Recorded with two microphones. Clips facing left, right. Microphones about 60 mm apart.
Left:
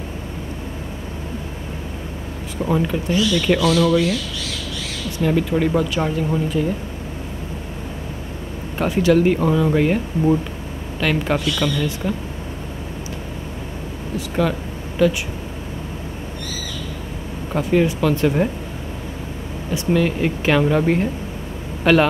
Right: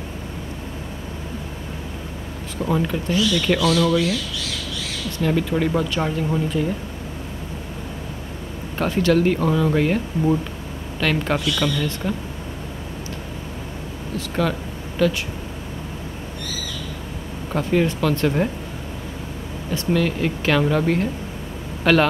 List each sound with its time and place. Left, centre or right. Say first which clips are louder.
2.6 s speech: left 2 dB; centre
5.2 s speech: left 2 dB; centre
8.7 s speech: left 2 dB; centre
14.1 s speech: left 2 dB; centre
17.5 s speech: left 2 dB; centre
19.7 s speech: left 2 dB; centre